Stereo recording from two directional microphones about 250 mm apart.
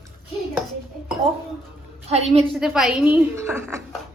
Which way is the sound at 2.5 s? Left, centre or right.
Centre.